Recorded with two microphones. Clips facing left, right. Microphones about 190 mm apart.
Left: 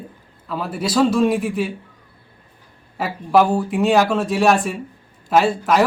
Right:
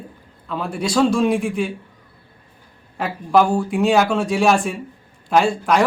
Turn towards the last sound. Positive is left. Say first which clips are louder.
# even
turn(degrees=5)  # may be behind; listen again after turning